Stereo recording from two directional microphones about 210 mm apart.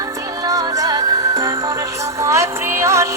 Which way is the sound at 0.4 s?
15° right (ahead or behind).